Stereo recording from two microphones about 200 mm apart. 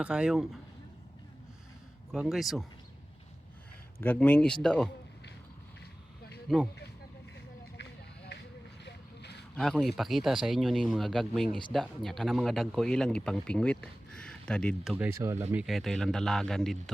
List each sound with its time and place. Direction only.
0.0 s speech: 5° right (ahead or behind)
2.1 s speech: centre (ahead or behind)
4.0 s speech: 10° left (ahead or behind)
8.3 s a sound: 55° left (ahead or behind)
9.6 s speech: centre (ahead or behind)
14.9 s speech: 10° right (ahead or behind)
15.6 s speech: centre (ahead or behind)